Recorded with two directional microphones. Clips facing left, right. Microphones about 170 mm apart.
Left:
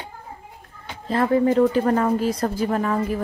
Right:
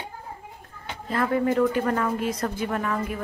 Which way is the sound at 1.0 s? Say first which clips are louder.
Left 5 dB; 30° left (ahead or behind).